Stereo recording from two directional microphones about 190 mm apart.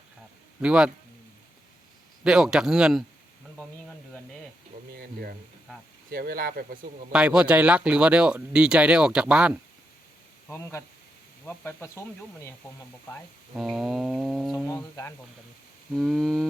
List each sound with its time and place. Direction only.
0.6 s speech: 5° right (ahead or behind)
2.2 s speech: 5° right (ahead or behind)
6.1 s speech: 50° right (ahead or behind)
7.1 s speech: 5° right (ahead or behind)
10.5 s speech: 15° left (ahead or behind)
13.6 s speech: centre (ahead or behind)
15.9 s speech: centre (ahead or behind)